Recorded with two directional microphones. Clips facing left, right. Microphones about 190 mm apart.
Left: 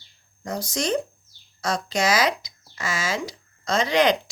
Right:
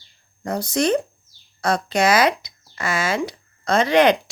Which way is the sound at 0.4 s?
60° right (ahead or behind).